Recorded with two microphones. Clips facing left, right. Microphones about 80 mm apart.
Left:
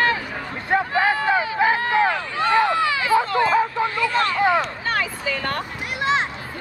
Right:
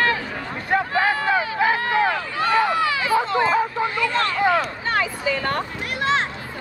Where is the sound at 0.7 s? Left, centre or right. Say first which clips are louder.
Left 1 dB; left.